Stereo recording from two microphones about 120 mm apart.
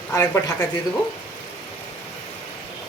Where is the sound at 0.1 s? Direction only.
25° left (ahead or behind).